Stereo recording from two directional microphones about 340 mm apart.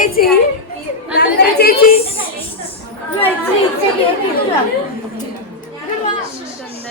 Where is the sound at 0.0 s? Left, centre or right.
Left.